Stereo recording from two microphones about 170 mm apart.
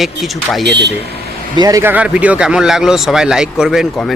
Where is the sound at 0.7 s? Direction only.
90° right.